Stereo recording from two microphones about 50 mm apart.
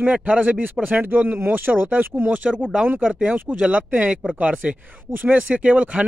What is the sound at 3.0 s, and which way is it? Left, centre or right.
Speech, centre.